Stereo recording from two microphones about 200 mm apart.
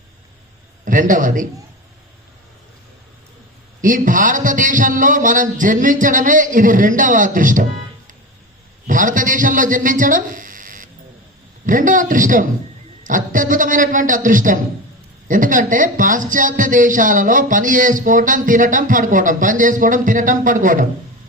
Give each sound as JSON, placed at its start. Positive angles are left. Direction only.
{"t": 0.9, "sound": "a man's voice", "side_deg": -40}
{"t": 3.8, "sound": "speech", "side_deg": -40}